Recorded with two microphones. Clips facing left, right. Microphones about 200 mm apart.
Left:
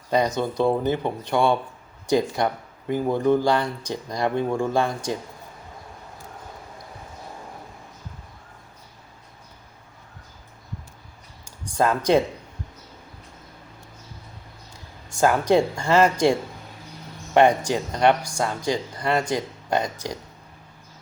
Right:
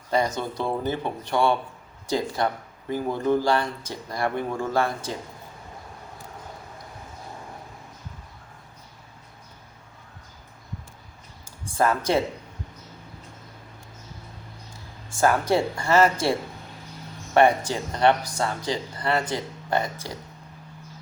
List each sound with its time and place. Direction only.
0.1 s speech: 15° left (ahead or behind)
11.7 s speech: 15° left (ahead or behind)
15.1 s speech: 15° left (ahead or behind)
17.3 s speech: 15° left (ahead or behind)